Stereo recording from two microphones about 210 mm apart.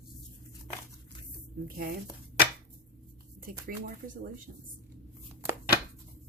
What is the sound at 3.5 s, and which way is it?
Speech, 40° right (ahead or behind).